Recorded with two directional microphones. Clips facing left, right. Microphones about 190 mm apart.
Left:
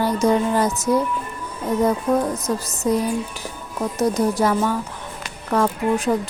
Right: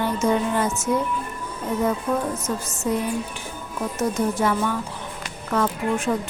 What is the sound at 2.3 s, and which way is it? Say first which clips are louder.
A woman's voice: left 3 dB; 35° left (ahead or behind).